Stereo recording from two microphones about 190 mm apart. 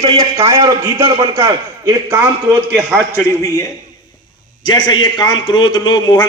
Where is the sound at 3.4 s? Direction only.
15° left (ahead or behind).